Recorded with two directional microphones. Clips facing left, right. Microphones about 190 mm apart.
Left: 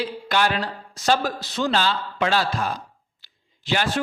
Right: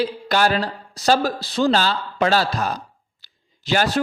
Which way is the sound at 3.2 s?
40° right (ahead or behind).